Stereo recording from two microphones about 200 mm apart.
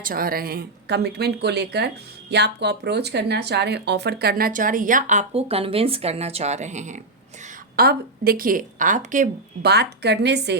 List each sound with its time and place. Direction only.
0.0 s speech: 45° right (ahead or behind)
7.4 s a woman's voice: 50° right (ahead or behind)